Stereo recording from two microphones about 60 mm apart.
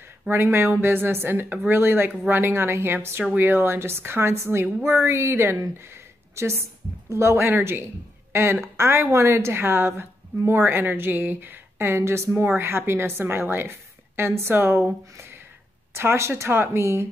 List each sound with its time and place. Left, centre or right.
0.3 s a woman's voice: right
15.9 s a woman's voice: right